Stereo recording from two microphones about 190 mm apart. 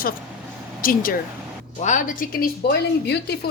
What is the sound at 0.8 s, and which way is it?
Frying, 50° left (ahead or behind).